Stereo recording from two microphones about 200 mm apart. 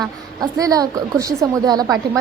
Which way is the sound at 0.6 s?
20° right (ahead or behind).